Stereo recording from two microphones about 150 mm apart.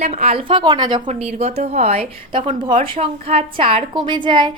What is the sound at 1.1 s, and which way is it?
A woman's voice, 45° right (ahead or behind).